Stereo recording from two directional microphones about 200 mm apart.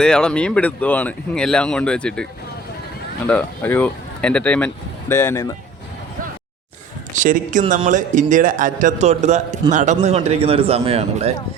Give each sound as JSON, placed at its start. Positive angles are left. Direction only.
{"t": 0.0, "sound": "speech", "side_deg": 5}
{"t": 3.2, "sound": "speech", "side_deg": 10}
{"t": 7.1, "sound": "a man's voice", "side_deg": -40}